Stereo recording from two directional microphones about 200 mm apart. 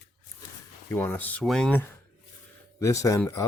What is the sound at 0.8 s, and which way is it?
Speech, 10° left (ahead or behind).